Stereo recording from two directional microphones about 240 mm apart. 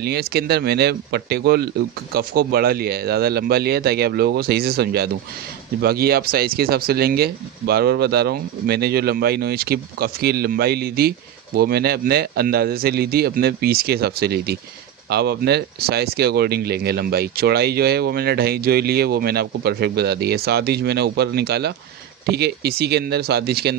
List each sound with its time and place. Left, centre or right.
0.0 s speech: right